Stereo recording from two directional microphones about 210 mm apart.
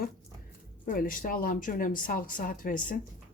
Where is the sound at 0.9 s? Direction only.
40° left (ahead or behind).